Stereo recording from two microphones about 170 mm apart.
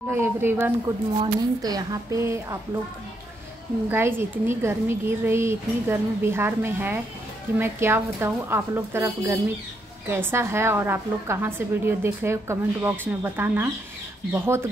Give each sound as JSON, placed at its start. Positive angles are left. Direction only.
{"t": 0.1, "sound": "speech", "side_deg": -15}
{"t": 3.9, "sound": "speech", "side_deg": -15}